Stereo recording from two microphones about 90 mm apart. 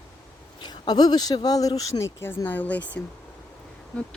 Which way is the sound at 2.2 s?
20° left (ahead or behind).